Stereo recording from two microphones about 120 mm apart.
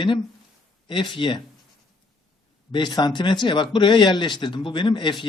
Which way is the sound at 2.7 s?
40° left (ahead or behind).